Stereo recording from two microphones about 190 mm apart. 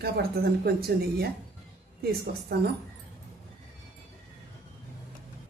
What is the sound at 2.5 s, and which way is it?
Speech, 60° right (ahead or behind).